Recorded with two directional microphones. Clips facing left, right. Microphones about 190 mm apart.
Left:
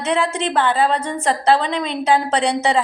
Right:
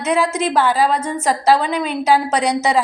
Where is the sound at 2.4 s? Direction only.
30° left (ahead or behind).